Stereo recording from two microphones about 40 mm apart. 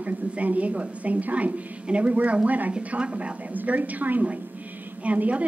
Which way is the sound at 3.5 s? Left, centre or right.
Right.